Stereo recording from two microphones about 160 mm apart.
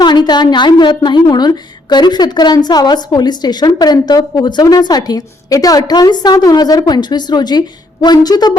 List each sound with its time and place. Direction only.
0.0 s a woman's voice: 30° left (ahead or behind)